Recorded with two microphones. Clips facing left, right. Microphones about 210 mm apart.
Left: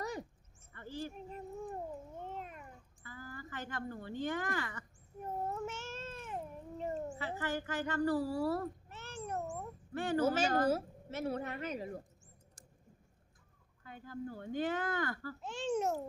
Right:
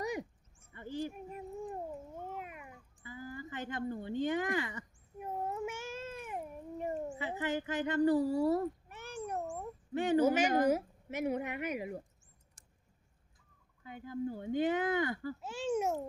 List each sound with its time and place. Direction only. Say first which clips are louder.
0.0 s a sound: right 3 dB; 15° right (ahead or behind)
2.2 s cat: right 1 dB; 10° right (ahead or behind)
13.8 s speech: right 5 dB; 15° right (ahead or behind)
15.4 s speech: even; 5° right (ahead or behind)